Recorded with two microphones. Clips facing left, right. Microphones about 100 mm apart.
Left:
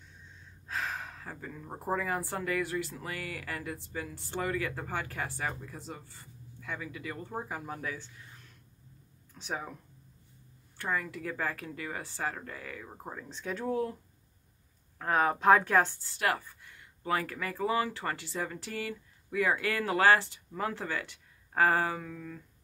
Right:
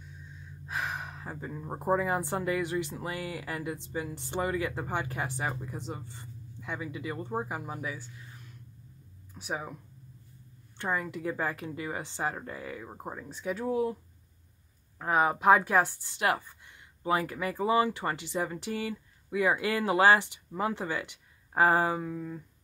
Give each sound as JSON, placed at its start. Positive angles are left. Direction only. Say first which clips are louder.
{"t": 0.7, "sound": "speech", "louder": "right 1 dB", "side_deg": -15}
{"t": 9.3, "sound": "speech", "louder": "right 2 dB", "side_deg": -10}
{"t": 10.8, "sound": "speech", "louder": "right 2 dB", "side_deg": -20}
{"t": 15.0, "sound": "speech", "louder": "right 1 dB", "side_deg": -10}